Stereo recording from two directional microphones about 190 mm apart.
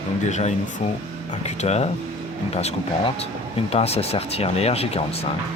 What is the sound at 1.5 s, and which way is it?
Speech, 35° left (ahead or behind).